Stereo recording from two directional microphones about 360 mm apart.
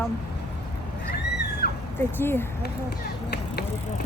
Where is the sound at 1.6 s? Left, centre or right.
Left.